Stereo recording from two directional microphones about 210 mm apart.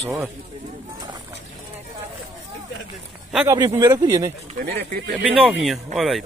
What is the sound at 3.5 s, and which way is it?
Speech, 15° right (ahead or behind).